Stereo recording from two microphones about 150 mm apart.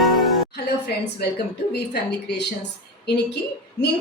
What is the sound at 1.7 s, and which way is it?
Speech, 90° left.